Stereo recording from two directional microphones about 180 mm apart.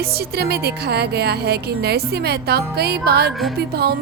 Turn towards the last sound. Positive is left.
turn(degrees=-60)  # may be behind; listen again after turning